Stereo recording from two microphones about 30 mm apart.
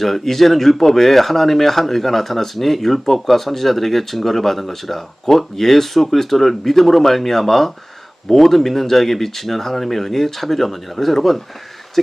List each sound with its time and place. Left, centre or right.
0.0 s speech: centre